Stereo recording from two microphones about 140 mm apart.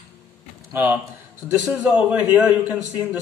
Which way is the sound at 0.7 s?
15° right (ahead or behind).